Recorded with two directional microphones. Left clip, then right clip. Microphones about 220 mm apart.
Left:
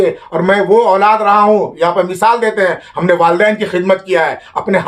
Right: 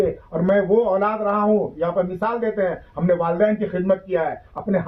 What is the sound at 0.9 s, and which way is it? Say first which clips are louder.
A man's voice: left 12 dB; 25° left (ahead or behind).